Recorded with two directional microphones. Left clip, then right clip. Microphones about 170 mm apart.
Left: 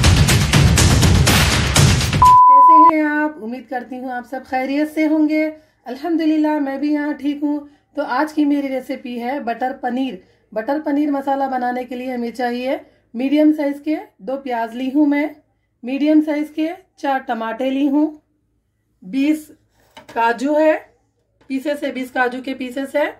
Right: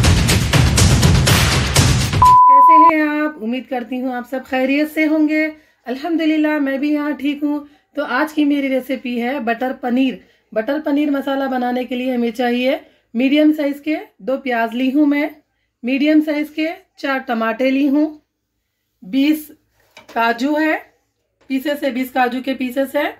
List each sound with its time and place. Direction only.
0.0 s music: centre (ahead or behind)
3.1 s a sound: 20° right (ahead or behind)
4.3 s speech: 25° right (ahead or behind)